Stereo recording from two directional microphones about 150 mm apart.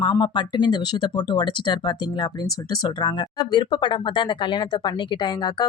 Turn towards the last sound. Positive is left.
turn(degrees=30)  # may be behind; listen again after turning